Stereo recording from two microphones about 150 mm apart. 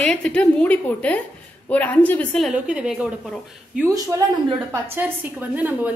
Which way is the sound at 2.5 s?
5° right (ahead or behind).